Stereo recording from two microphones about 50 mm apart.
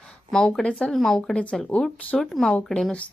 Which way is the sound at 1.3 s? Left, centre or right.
Centre.